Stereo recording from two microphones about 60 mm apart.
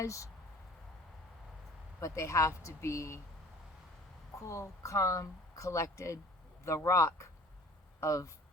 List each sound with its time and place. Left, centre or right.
0.0 s a woman's voice: left
2.0 s a woman's voice: left
4.4 s a woman's voice: left